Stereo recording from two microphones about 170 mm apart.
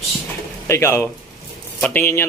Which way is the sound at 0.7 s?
15° left (ahead or behind).